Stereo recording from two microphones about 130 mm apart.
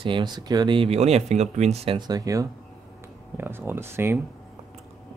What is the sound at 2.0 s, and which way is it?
Speech, 30° right (ahead or behind).